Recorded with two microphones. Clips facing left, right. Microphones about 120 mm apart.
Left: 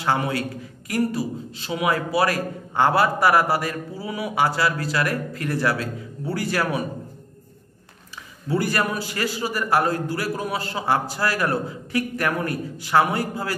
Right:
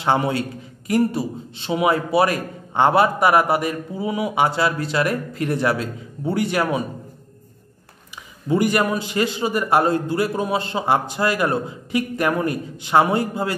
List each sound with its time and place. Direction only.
0.0 s a man's voice: 25° right (ahead or behind)
8.5 s a man's voice: 20° right (ahead or behind)